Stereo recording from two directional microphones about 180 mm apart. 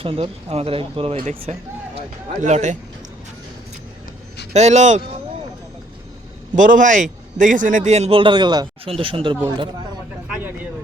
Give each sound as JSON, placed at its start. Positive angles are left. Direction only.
{"t": 0.0, "sound": "a man's voice", "side_deg": -30}
{"t": 4.5, "sound": "a man's voice", "side_deg": -40}
{"t": 6.6, "sound": "a man's voice", "side_deg": -45}
{"t": 10.2, "sound": "a sound", "side_deg": -10}